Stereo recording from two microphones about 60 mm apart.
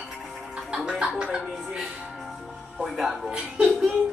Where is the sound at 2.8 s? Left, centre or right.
Centre.